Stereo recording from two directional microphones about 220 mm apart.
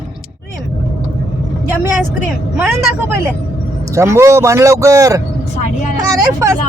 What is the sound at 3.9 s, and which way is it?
A man's voice, 10° right (ahead or behind).